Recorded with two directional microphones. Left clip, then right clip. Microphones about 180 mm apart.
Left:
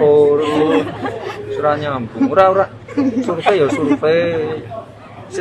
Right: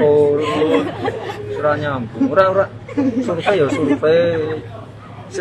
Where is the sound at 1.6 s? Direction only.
15° left (ahead or behind).